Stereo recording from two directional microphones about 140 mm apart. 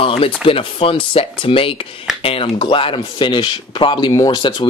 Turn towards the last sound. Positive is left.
turn(degrees=35)  # may be behind; listen again after turning